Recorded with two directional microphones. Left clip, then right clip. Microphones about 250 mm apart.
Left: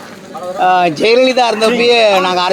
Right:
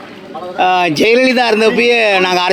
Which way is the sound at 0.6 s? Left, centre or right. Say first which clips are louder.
Left 1 dB; right.